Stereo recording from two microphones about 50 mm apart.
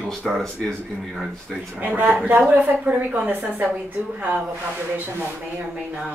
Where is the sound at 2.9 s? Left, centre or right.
Right.